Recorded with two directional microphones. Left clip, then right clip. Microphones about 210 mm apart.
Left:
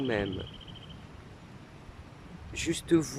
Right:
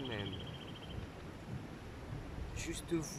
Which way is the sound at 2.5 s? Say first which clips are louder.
Left 13 dB; 45° left (ahead or behind).